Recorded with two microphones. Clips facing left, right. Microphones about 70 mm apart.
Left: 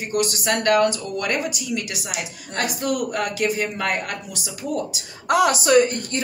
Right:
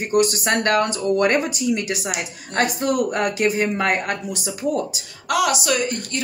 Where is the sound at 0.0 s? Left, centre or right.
Right.